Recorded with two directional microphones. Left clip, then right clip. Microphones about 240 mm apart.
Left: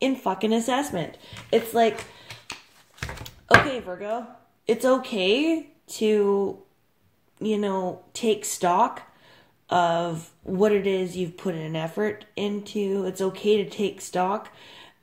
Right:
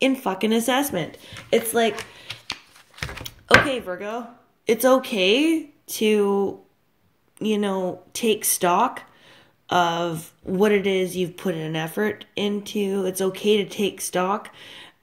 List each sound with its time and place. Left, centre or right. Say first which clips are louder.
0.0 s speech: right 3 dB; right
3.0 s a sound: right 3 dB; centre
3.4 s speech: right 1 dB; right